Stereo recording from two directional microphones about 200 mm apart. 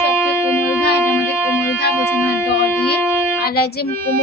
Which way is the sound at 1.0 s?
10° left (ahead or behind).